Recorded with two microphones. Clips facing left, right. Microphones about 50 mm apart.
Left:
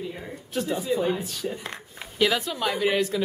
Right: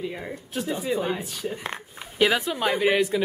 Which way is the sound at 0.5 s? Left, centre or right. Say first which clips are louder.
Left 1 dB; centre.